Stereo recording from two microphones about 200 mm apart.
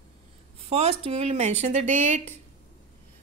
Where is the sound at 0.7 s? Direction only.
35° right (ahead or behind).